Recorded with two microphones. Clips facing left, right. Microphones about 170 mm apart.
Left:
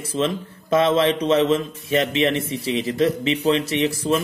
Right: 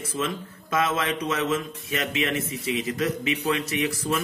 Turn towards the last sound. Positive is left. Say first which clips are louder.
# left 6 dB
turn(degrees=30)  # may be behind; listen again after turning